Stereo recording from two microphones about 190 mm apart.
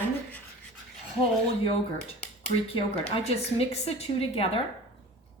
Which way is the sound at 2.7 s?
30° left (ahead or behind).